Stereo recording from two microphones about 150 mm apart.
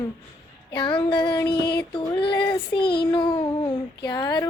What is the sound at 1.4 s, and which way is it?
Music, 90° left.